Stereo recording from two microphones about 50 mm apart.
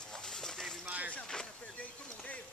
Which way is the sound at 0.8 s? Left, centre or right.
Right.